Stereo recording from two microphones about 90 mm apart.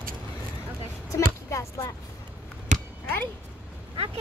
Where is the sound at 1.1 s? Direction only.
35° left (ahead or behind).